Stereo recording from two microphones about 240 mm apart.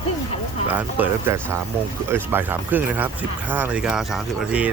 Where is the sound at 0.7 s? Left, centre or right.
Centre.